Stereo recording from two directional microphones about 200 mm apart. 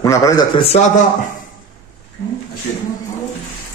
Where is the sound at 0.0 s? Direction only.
15° left (ahead or behind).